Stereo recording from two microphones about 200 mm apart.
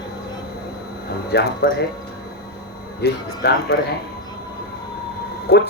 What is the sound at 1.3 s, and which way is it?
Speech, 50° left (ahead or behind).